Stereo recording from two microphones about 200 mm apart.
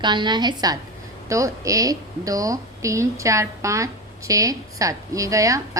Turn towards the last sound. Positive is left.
turn(degrees=-15)  # may be behind; listen again after turning